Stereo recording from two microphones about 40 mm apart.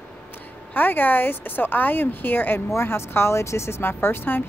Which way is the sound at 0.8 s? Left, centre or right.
Left.